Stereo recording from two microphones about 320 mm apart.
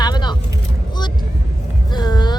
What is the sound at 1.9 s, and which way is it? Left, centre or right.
Vehicle, centre.